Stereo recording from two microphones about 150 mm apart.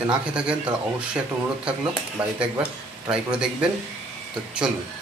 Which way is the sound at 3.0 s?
5° right (ahead or behind).